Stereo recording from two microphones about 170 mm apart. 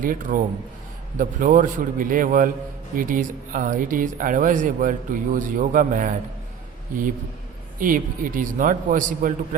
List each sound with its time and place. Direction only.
0.0 s speech: 55° right (ahead or behind)
7.8 s speech: 55° right (ahead or behind)